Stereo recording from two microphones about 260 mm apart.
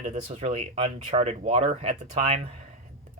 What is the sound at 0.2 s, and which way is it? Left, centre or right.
Speech, right.